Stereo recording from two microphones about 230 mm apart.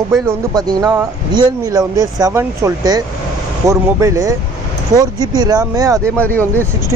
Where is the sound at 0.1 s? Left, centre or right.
Centre.